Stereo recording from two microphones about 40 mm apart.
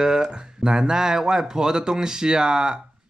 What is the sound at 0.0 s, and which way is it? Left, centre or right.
Speech, centre.